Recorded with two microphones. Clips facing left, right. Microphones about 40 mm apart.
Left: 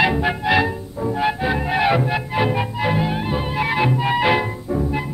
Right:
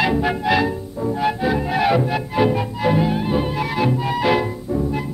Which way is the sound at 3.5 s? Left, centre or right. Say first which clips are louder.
Left 1 dB; left.